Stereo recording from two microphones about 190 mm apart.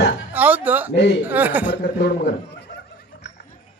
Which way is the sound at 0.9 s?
65° left (ahead or behind).